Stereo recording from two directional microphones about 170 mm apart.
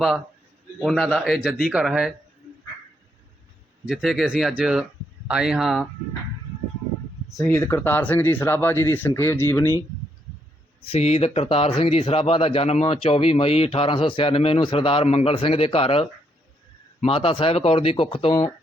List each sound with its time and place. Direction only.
0.8 s speech: 5° right (ahead or behind)
3.8 s speech: 5° right (ahead or behind)
7.4 s speech: 15° left (ahead or behind)
10.8 s speech: 35° left (ahead or behind)